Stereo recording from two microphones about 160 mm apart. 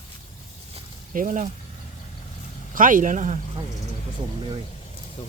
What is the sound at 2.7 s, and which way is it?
Speech, 55° right (ahead or behind).